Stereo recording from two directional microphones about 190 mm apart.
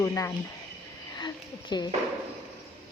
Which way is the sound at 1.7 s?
20° left (ahead or behind).